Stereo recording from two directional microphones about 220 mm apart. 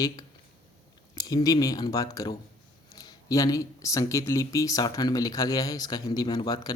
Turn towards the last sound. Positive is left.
turn(degrees=15)  # may be behind; listen again after turning